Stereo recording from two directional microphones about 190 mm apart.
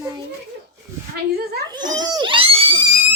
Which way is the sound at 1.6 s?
20° right (ahead or behind).